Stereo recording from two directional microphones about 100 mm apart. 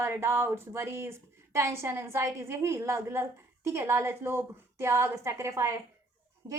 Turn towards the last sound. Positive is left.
turn(degrees=-30)  # may be behind; listen again after turning